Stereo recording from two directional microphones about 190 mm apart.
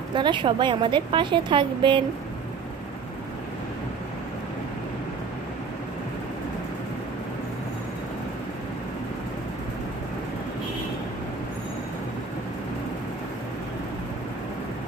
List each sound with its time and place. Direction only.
0.1 s a woman's voice: 25° right (ahead or behind)